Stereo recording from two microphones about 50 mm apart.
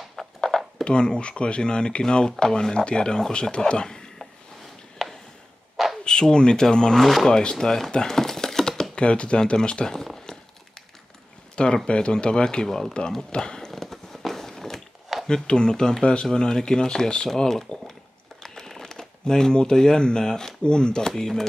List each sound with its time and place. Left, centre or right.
0.1 s a sound: centre
0.8 s speech: centre
5.0 s a sound: centre
6.0 s speech: centre
7.1 s speech: centre
7.3 s speech: centre
8.9 s speech: left
11.5 s speech: centre
13.7 s walk: centre
15.2 s speech: centre